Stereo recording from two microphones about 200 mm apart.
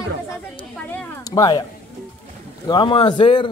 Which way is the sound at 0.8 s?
10° left (ahead or behind).